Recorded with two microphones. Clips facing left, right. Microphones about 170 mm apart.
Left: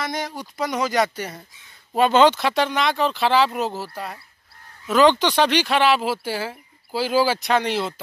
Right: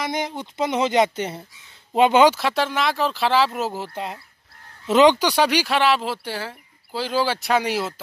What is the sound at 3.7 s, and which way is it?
Speech, 20° right (ahead or behind).